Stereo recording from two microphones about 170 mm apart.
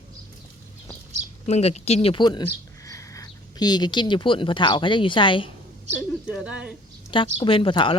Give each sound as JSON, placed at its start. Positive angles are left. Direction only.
{"t": 1.5, "sound": "speech", "side_deg": 40}
{"t": 6.2, "sound": "speech", "side_deg": -5}
{"t": 7.1, "sound": "a woman's voice", "side_deg": 30}